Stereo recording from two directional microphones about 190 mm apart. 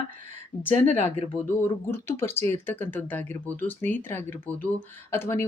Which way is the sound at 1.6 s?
10° left (ahead or behind).